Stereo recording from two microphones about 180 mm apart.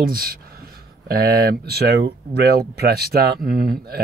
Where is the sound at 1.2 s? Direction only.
60° right (ahead or behind).